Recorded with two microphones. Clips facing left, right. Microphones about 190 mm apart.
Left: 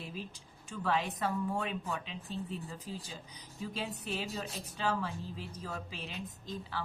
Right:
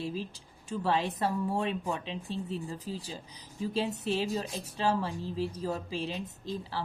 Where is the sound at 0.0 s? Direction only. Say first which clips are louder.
Right 8 dB; 35° right (ahead or behind).